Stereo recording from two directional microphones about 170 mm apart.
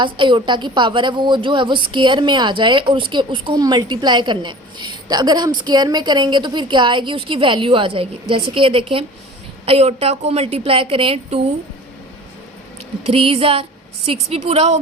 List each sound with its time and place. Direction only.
0.0 s a woman's voice: 30° right (ahead or behind)
13.1 s a woman's voice: 35° right (ahead or behind)